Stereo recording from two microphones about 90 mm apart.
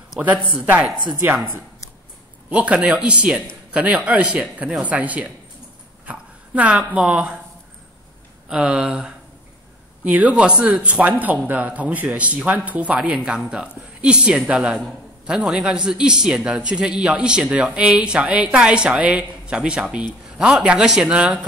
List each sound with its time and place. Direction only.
0.2 s a man's voice: 15° right (ahead or behind)
1.2 s speech: 25° right (ahead or behind)
2.5 s a man's voice: 15° right (ahead or behind)
8.5 s a man's voice: 10° right (ahead or behind)